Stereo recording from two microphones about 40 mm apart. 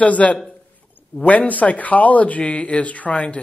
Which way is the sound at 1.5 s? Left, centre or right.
Left.